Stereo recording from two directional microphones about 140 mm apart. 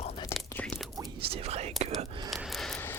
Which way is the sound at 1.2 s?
45° right (ahead or behind).